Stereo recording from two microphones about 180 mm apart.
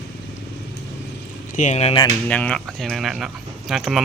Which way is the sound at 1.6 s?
40° left (ahead or behind).